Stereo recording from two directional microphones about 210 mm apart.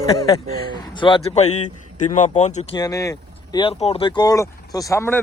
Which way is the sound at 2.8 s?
15° left (ahead or behind).